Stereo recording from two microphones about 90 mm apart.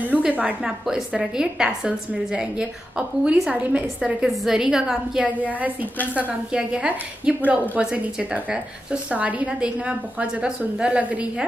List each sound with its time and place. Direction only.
0.2 s a woman's voice: 15° right (ahead or behind)
0.6 s a woman's voice: 5° right (ahead or behind)
6.5 s a woman's voice: 10° right (ahead or behind)